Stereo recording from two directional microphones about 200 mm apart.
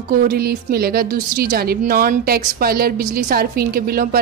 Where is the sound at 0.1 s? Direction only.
45° right (ahead or behind).